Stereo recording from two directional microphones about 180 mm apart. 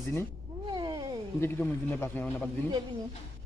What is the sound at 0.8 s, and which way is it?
Cat, 20° right (ahead or behind).